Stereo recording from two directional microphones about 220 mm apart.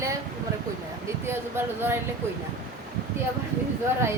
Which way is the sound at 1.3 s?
10° right (ahead or behind).